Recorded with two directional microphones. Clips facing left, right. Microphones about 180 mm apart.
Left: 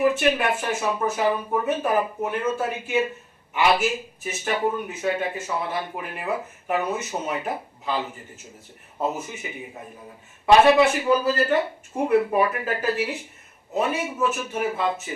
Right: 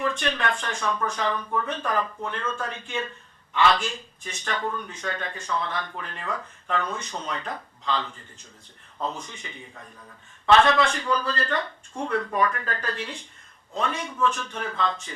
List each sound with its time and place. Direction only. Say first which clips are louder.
0.0 s a man's voice: left 6 dB; 10° left (ahead or behind)
9.7 s a man's voice: left 6 dB; 25° left (ahead or behind)
10.4 s a man's voice: left 4 dB; 10° left (ahead or behind)